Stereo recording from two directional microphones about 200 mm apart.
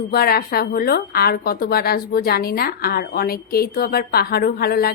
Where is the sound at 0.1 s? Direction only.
50° left (ahead or behind).